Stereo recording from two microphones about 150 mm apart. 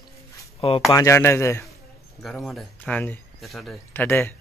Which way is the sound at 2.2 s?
Centre (ahead or behind).